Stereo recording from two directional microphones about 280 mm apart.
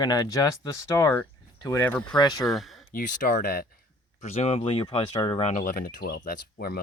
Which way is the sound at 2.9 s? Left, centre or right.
Left.